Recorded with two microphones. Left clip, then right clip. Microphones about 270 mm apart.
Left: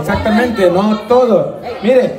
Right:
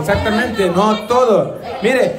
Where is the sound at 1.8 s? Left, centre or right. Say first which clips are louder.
Left 3 dB; centre.